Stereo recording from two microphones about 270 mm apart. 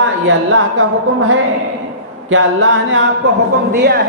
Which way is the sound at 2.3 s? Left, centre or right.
Right.